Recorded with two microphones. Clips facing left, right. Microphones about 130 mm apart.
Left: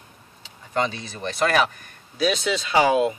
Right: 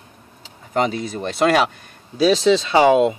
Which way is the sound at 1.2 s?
25° right (ahead or behind).